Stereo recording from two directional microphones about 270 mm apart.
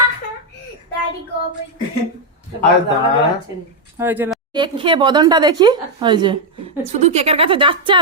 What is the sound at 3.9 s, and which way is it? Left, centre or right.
Speech, centre.